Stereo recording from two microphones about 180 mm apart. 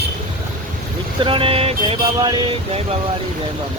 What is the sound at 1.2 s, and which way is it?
Speech, 30° right (ahead or behind).